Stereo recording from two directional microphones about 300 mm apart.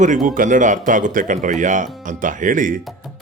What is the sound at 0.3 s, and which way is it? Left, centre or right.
Speech, right.